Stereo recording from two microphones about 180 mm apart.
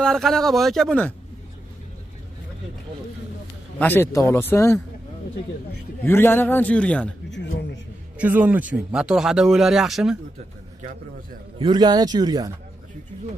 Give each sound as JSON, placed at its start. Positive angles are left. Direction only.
{"t": 0.0, "sound": "speech", "side_deg": 0}
{"t": 3.8, "sound": "a man's voice", "side_deg": 10}
{"t": 6.0, "sound": "a man's voice", "side_deg": 10}
{"t": 7.2, "sound": "speech", "side_deg": 80}
{"t": 8.2, "sound": "speech", "side_deg": -10}
{"t": 11.5, "sound": "a man's voice", "side_deg": -25}